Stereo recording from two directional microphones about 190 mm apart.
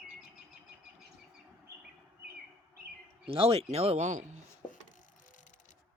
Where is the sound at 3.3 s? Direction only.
30° right (ahead or behind).